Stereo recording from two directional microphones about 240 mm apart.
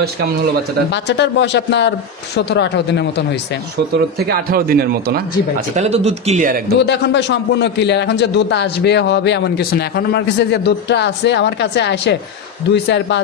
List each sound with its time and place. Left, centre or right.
0.9 s a man's voice: left
3.9 s a man's voice: right
5.8 s speech: right
6.8 s a man's voice: left